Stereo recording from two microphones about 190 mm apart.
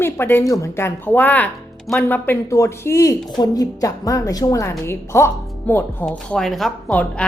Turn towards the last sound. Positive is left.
turn(degrees=5)  # may be behind; listen again after turning